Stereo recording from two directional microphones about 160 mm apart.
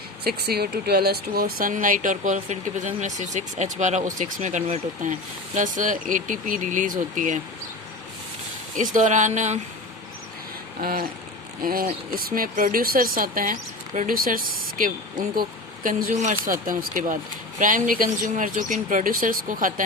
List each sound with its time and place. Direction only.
0.3 s speech: 80° right; by 7.3 s 55° right (ahead or behind)
8.7 s speech: 55° right (ahead or behind)
10.8 s vehicle: 65° right (ahead or behind)
11.6 s speech: 65° right (ahead or behind)